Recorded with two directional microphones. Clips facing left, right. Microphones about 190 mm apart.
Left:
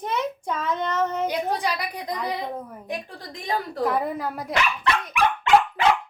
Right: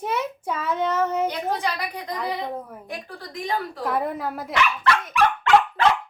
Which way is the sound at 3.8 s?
Centre (ahead or behind).